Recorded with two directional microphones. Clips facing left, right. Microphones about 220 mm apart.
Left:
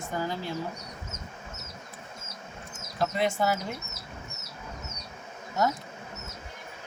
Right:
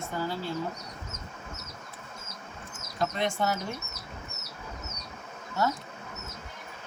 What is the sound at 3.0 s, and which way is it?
Speech, 5° left (ahead or behind).